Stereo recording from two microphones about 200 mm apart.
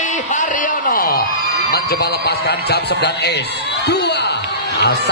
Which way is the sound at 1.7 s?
55° left (ahead or behind).